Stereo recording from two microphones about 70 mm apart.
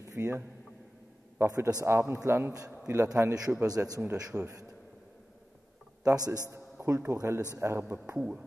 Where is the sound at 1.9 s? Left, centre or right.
Right.